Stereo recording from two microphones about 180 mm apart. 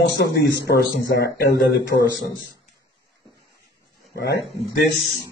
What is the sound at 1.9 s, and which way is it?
Speech, 40° left (ahead or behind).